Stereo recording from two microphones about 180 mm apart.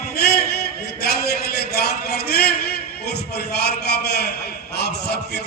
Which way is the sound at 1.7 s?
65° left (ahead or behind).